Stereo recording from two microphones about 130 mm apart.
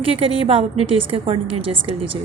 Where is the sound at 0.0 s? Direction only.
45° right (ahead or behind).